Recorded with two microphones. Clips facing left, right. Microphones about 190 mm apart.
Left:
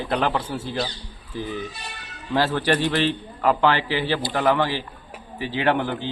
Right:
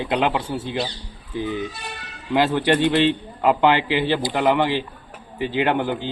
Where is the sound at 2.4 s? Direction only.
20° right (ahead or behind).